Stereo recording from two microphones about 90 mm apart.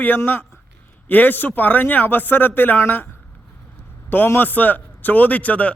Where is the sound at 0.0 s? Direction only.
20° left (ahead or behind).